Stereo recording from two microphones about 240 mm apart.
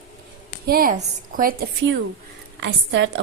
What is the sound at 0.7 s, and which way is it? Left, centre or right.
Speech, right.